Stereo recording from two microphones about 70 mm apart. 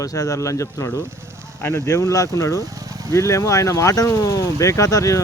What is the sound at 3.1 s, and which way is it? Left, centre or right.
Speech, left.